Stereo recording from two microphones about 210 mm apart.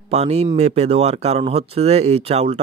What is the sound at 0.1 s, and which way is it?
Speech, 30° right (ahead or behind).